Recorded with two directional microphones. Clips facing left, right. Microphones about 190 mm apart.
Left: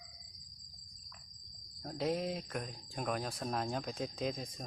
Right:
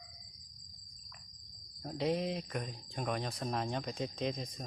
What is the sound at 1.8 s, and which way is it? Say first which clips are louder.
Speech: right 2 dB; centre (ahead or behind).